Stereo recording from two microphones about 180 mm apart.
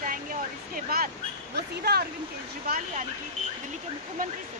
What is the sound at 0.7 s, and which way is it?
Speech, 55° right (ahead or behind).